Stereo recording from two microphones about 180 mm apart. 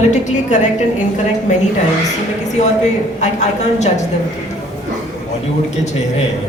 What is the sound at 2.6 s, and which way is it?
A woman's voice, 40° left (ahead or behind).